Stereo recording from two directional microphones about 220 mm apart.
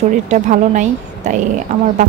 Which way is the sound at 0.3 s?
35° right (ahead or behind).